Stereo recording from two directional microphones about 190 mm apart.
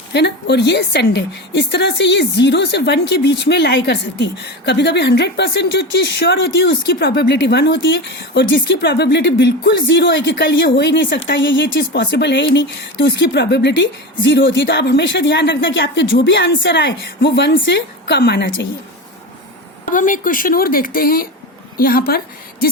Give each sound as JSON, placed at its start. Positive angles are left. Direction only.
{"t": 0.1, "sound": "a woman's voice", "side_deg": 60}
{"t": 19.8, "sound": "speech", "side_deg": 45}